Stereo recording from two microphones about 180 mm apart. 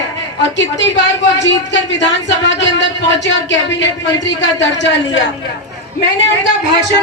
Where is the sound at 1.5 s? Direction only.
80° left.